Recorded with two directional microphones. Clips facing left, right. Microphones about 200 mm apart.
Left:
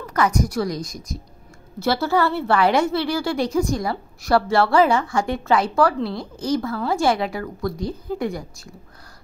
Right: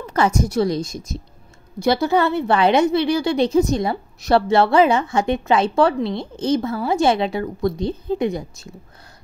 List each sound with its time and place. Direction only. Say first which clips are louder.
0.0 s a woman's voice: right 2 dB; 25° right (ahead or behind)